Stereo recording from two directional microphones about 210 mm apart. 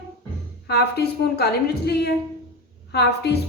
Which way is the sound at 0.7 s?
50° left (ahead or behind).